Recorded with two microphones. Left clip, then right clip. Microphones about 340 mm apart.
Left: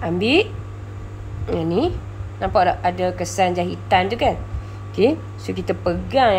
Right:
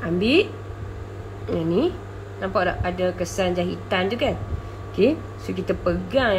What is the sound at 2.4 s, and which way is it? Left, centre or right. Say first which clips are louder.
Speech: left 6 dB; centre.